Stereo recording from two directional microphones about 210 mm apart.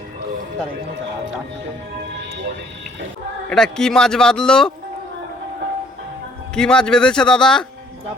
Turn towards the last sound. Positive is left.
turn(degrees=5)  # may be behind; listen again after turning